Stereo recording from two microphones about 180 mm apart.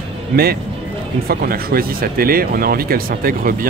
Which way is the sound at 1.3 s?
55° right (ahead or behind).